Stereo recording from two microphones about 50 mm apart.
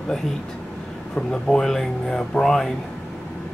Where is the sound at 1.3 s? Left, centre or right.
Centre.